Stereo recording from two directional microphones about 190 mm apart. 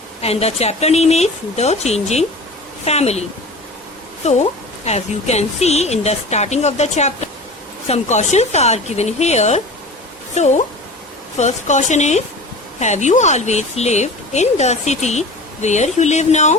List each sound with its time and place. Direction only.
0.2 s speech: 35° left (ahead or behind)